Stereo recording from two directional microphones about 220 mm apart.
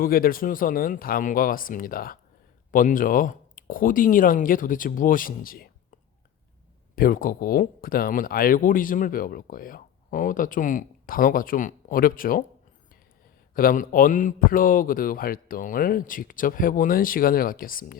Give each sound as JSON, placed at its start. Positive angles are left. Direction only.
{"t": 0.0, "sound": "speech", "side_deg": 40}
{"t": 6.9, "sound": "speech", "side_deg": 40}
{"t": 13.5, "sound": "speech", "side_deg": 40}